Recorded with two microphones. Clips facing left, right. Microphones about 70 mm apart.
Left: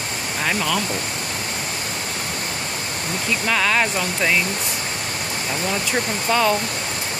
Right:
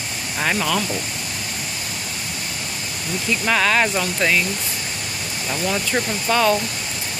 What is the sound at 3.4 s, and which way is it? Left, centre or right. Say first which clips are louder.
Speech: right 2 dB; centre.